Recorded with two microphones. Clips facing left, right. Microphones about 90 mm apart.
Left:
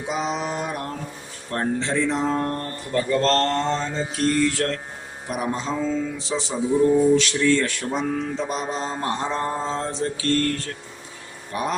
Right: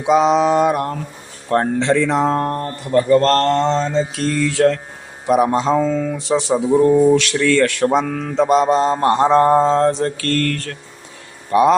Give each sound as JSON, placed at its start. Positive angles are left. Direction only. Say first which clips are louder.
{"t": 0.0, "sound": "mantra", "louder": "right 12 dB", "side_deg": -90}
{"t": 1.5, "sound": "speech", "louder": "right 8 dB", "side_deg": -90}
{"t": 3.1, "sound": "mantra", "louder": "right 6 dB", "side_deg": -55}
{"t": 5.3, "sound": "speech", "louder": "right 12 dB", "side_deg": -90}
{"t": 5.8, "sound": "music", "louder": "right 6 dB", "side_deg": -60}
{"t": 7.1, "sound": "mantra", "louder": "right 4 dB", "side_deg": -75}
{"t": 11.5, "sound": "mantra", "louder": "right 13 dB", "side_deg": -90}